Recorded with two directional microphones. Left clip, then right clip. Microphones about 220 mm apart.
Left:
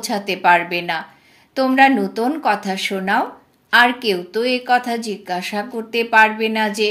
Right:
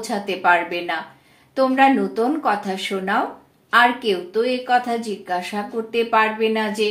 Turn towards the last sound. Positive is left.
turn(degrees=35)  # may be behind; listen again after turning